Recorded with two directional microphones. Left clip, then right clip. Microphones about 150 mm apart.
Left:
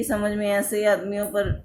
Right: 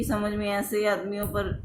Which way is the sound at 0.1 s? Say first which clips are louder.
Left 5 dB; 35° left (ahead or behind).